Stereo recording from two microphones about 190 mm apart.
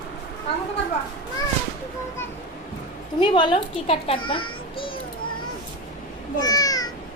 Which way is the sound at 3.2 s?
25° left (ahead or behind).